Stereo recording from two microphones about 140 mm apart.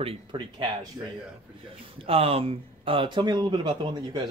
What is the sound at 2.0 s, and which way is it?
A man's voice, 45° right (ahead or behind).